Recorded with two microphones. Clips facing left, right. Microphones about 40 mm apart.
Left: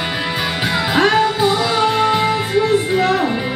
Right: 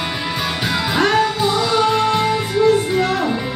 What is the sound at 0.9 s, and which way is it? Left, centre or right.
Music, centre.